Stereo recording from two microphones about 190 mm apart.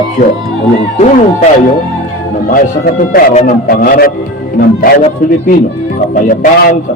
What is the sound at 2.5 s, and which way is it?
Speech, 45° left (ahead or behind).